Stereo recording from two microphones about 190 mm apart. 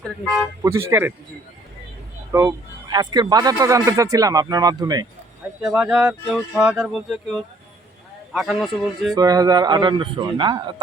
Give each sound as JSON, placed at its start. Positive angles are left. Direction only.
{"t": 0.6, "sound": "speech", "side_deg": -15}
{"t": 2.3, "sound": "speech", "side_deg": -15}
{"t": 5.7, "sound": "speech", "side_deg": -5}
{"t": 8.3, "sound": "speech", "side_deg": 0}
{"t": 9.1, "sound": "speech", "side_deg": -20}